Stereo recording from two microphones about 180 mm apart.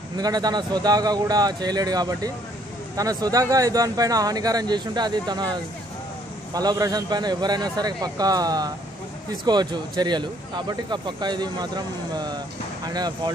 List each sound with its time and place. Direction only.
0.2 s a man's voice: 20° right (ahead or behind)